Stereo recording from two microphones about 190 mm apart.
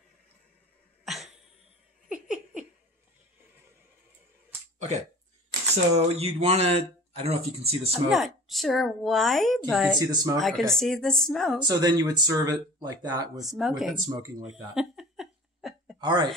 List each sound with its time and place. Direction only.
1.0 s a sound: centre (ahead or behind)
2.2 s laughter: 5° right (ahead or behind)
4.7 s a sound: 40° right (ahead or behind)
5.9 s speech: 30° right (ahead or behind)
8.1 s speech: centre (ahead or behind)
9.9 s speech: 20° right (ahead or behind)
10.4 s speech: 5° left (ahead or behind)
11.6 s speech: 20° right (ahead or behind)
13.4 s speech: centre (ahead or behind)
14.5 s a sound: centre (ahead or behind)
16.0 s speech: 25° right (ahead or behind)